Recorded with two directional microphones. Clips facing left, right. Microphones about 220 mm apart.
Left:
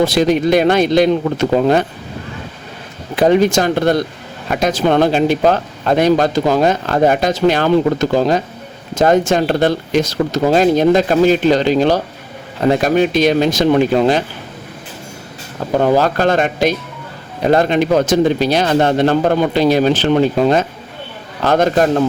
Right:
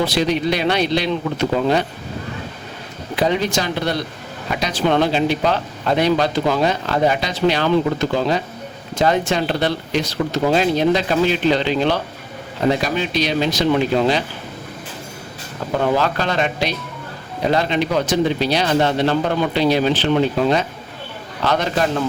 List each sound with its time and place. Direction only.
0.0 s speech: 45° left (ahead or behind)
3.2 s speech: 50° left (ahead or behind)
15.8 s speech: 40° left (ahead or behind)